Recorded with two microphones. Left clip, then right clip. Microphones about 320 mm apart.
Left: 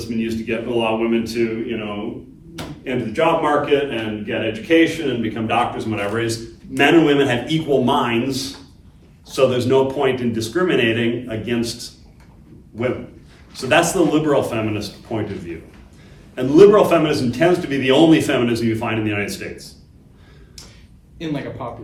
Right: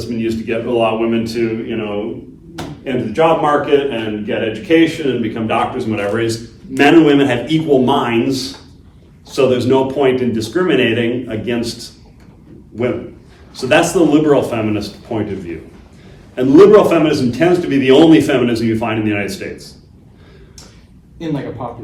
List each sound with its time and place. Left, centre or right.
0.2 s a man's voice: centre
4.3 s a man's voice: centre
12.7 s a man's voice: centre
13.5 s a man's voice: centre
21.2 s a man's voice: centre